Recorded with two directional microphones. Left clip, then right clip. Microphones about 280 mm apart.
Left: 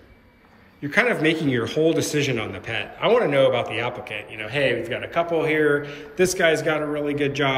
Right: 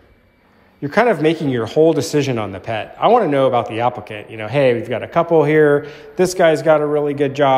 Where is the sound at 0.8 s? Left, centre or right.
Centre.